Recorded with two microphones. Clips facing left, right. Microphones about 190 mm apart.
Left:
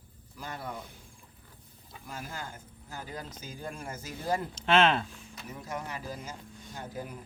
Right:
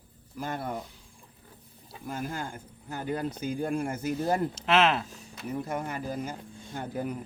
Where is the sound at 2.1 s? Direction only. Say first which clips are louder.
Right 7 dB; 50° right (ahead or behind).